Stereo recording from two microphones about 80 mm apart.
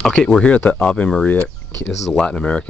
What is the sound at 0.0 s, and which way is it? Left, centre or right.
Speech, centre.